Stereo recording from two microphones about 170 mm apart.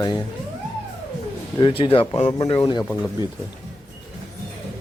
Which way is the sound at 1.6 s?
30° left (ahead or behind).